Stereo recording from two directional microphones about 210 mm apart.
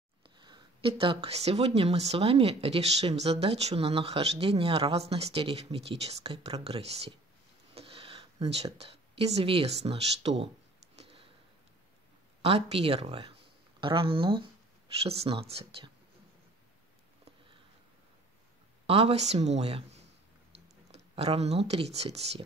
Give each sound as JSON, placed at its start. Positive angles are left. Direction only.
{"t": 0.2, "sound": "speech", "side_deg": -20}
{"t": 11.0, "sound": "a sound", "side_deg": -25}
{"t": 12.4, "sound": "speech", "side_deg": -30}
{"t": 18.9, "sound": "speech", "side_deg": -30}